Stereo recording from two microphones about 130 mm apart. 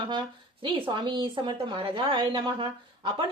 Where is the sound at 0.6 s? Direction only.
40° right (ahead or behind).